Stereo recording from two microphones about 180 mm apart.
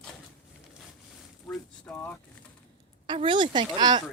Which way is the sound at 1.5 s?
10° left (ahead or behind).